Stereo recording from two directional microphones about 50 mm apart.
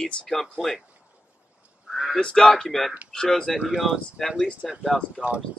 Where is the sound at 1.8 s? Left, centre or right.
Centre.